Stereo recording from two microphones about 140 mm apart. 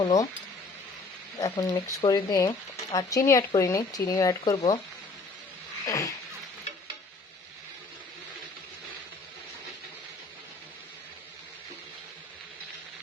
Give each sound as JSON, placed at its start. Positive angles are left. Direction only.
{"t": 0.0, "sound": "speech", "side_deg": 25}
{"t": 1.4, "sound": "speech", "side_deg": 25}
{"t": 5.8, "sound": "speech", "side_deg": 25}